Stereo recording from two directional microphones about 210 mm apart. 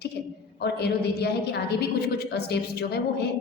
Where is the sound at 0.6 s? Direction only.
50° left (ahead or behind).